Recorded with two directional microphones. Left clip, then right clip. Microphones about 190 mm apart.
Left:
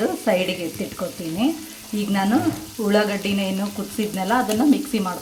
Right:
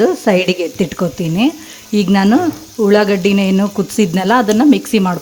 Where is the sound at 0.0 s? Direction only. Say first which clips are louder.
Right 8 dB; 50° right (ahead or behind).